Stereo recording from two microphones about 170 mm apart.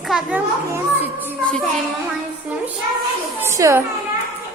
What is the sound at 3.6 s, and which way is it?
Speech, 15° right (ahead or behind).